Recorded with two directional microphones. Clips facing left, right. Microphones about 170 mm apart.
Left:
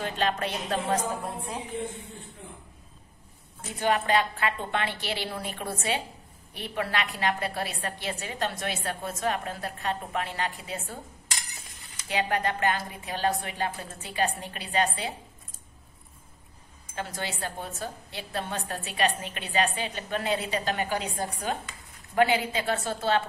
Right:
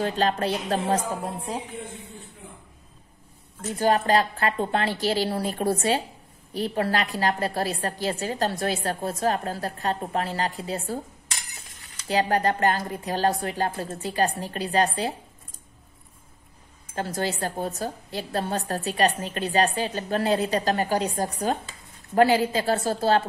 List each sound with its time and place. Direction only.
0.0 s a woman's voice: 35° right (ahead or behind)
3.8 s a woman's voice: 40° right (ahead or behind)
12.1 s a woman's voice: 35° right (ahead or behind)
16.9 s a woman's voice: 40° right (ahead or behind)